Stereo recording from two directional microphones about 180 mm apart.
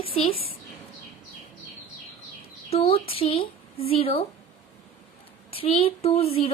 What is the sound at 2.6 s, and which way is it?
Speech, 35° left (ahead or behind).